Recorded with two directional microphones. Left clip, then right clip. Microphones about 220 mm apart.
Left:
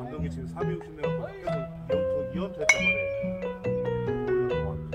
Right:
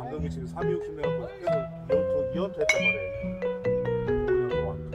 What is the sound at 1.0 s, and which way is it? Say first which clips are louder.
Music: right 1 dB; centre (ahead or behind).